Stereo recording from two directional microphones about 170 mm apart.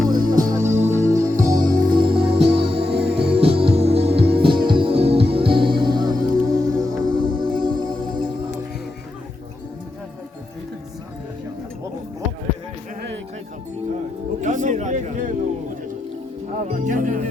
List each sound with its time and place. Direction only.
0.1 s music: 25° right (ahead or behind)
3.0 s music: 70° right (ahead or behind)
3.3 s music: 35° right (ahead or behind)
14.4 s a sound: 45° right (ahead or behind)
16.6 s music: 45° right (ahead or behind)